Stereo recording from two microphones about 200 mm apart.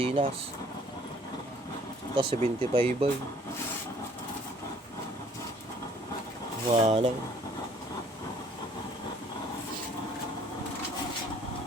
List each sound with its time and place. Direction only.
0.0 s speech: 30° right (ahead or behind)
2.1 s speech: 25° right (ahead or behind)
6.7 s speech: 30° right (ahead or behind)